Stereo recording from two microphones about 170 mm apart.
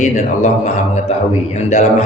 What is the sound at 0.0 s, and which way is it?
Mantra, 45° left (ahead or behind).